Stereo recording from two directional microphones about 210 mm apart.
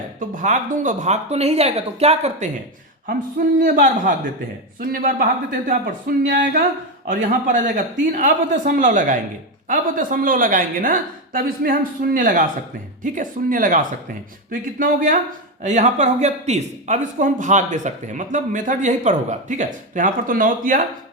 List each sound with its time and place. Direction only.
0.3 s speech: 35° right (ahead or behind)
3.6 s speech: 40° right (ahead or behind)